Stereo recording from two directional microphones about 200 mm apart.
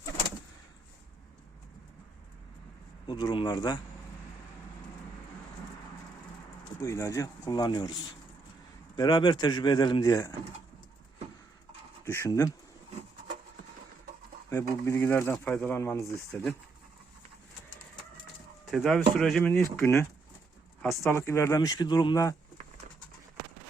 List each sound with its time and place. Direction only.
3.1 s speech: 20° left (ahead or behind)
6.7 s speech: 15° left (ahead or behind)
9.0 s speech: 20° left (ahead or behind)
12.0 s speech: 10° left (ahead or behind)
14.8 s speech: 10° left (ahead or behind)
18.6 s speech: centre (ahead or behind); by 22.4 s 15° left (ahead or behind)